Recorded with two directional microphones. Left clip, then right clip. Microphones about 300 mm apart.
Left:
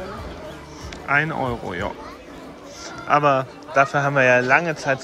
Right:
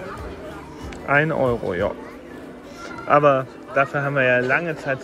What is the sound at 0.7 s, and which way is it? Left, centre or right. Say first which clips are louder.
A man's voice: right 1 dB; centre.